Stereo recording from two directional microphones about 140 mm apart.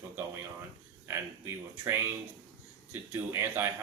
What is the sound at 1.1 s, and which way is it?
Speech, 20° right (ahead or behind).